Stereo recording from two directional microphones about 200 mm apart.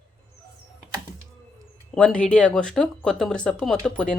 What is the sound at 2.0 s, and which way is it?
Speech, 5° left (ahead or behind).